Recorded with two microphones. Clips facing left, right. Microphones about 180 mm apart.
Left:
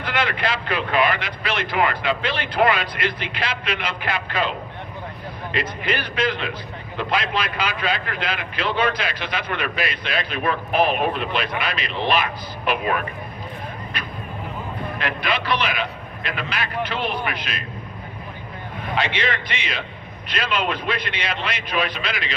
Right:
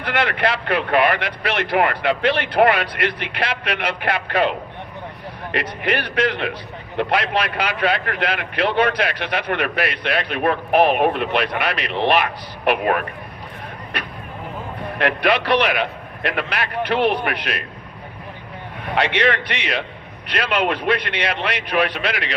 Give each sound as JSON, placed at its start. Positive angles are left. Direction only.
{"t": 0.0, "sound": "a man's voice", "side_deg": -65}
{"t": 18.9, "sound": "a man's voice", "side_deg": -65}